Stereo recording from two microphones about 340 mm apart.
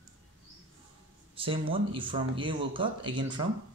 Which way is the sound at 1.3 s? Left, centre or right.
Centre.